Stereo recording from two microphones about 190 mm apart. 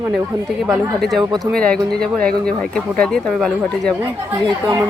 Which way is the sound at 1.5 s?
5° left (ahead or behind).